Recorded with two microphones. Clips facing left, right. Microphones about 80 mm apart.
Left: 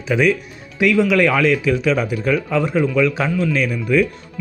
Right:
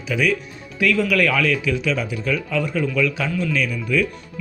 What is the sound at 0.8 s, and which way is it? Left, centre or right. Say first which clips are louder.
A man's voice: left 4 dB; centre.